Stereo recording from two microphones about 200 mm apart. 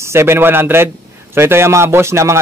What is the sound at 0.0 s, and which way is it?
A man's voice, 15° right (ahead or behind).